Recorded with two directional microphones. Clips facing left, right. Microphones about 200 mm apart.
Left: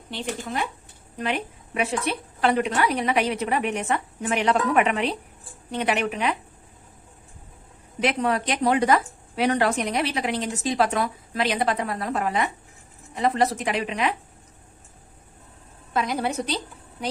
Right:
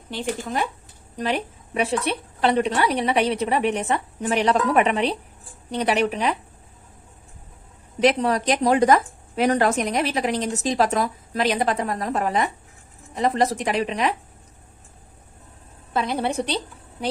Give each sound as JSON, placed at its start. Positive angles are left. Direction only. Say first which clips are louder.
{"t": 0.1, "sound": "speech", "louder": "right 3 dB", "side_deg": -45}
{"t": 1.2, "sound": "a woman's voice", "louder": "right 3 dB", "side_deg": -35}
{"t": 8.0, "sound": "a woman's voice", "louder": "right 4 dB", "side_deg": -35}
{"t": 15.9, "sound": "a woman's voice", "louder": "right 1 dB", "side_deg": -30}